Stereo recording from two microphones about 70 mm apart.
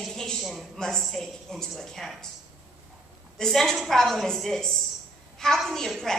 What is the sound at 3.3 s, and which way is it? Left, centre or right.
A woman's voice, centre.